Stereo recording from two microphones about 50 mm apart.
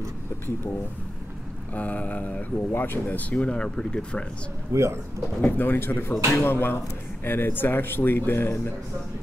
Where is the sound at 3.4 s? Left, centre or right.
Left.